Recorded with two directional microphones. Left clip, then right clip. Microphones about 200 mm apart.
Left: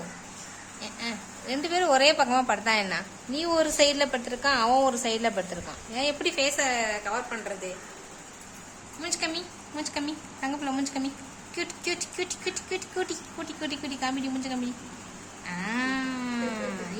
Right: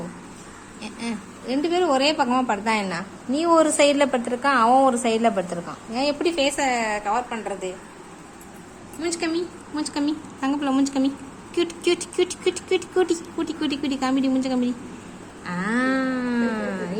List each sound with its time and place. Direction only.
1.5 s a woman's voice: centre (ahead or behind)
9.0 s speech: 10° right (ahead or behind)
15.4 s a sound: 10° right (ahead or behind)